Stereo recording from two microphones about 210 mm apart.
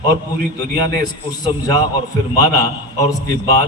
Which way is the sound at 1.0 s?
20° left (ahead or behind).